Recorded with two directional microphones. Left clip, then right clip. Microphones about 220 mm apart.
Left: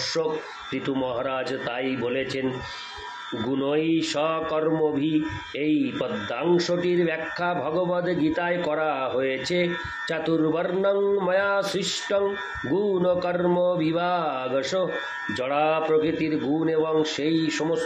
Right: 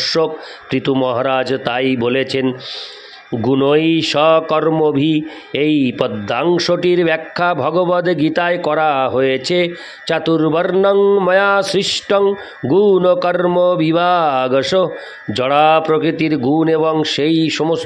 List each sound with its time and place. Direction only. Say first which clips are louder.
0.0 s a man's voice: right 9 dB; 45° right (ahead or behind)
3.4 s a man's voice: right 11 dB; 45° right (ahead or behind)